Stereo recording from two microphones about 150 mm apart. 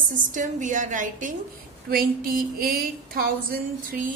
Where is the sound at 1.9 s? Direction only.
75° right (ahead or behind).